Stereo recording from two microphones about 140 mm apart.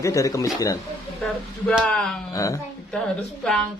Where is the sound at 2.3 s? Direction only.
25° left (ahead or behind).